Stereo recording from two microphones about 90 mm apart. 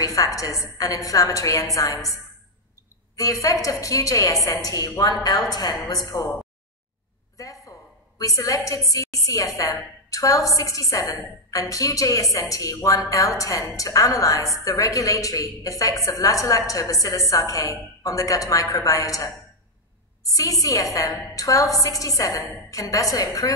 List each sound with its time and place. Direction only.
0.0 s a woman's voice: 40° left (ahead or behind)
3.2 s a woman's voice: 40° left (ahead or behind)
7.3 s a sound: 40° left (ahead or behind)
8.2 s a woman's voice: 40° left (ahead or behind)